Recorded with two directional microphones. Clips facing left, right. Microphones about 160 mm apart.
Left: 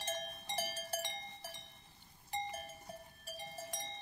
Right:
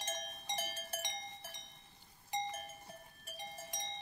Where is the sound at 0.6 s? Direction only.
35° left (ahead or behind).